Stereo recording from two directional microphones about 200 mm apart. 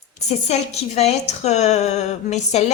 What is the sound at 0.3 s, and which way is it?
Speech, 30° left (ahead or behind).